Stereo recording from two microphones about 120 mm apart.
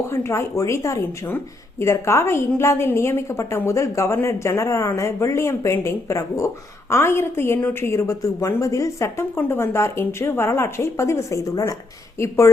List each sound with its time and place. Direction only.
0.1 s a woman's voice: 25° left (ahead or behind)